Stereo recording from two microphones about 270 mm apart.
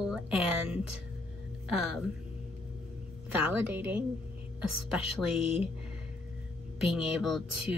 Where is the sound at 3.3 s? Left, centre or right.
Centre.